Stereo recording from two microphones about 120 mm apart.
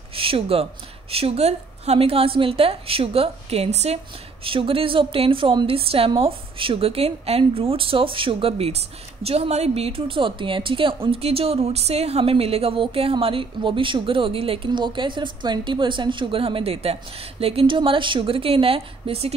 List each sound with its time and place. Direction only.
0.1 s a woman's voice: 50° right (ahead or behind)
4.5 s a woman's voice: 50° right (ahead or behind)